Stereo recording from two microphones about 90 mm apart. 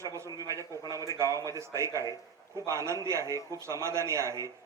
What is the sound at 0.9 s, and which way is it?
A man's voice, 35° right (ahead or behind).